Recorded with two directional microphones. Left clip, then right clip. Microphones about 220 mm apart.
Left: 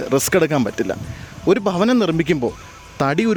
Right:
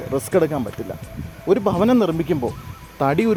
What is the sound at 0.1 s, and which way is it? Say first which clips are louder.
Speech: left 2 dB; 40° left (ahead or behind).